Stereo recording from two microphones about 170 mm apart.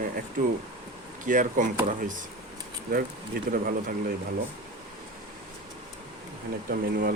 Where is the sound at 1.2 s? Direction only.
50° right (ahead or behind).